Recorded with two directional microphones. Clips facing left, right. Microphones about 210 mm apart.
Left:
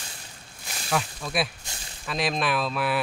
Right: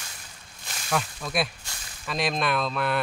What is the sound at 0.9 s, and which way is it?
Speech, centre (ahead or behind).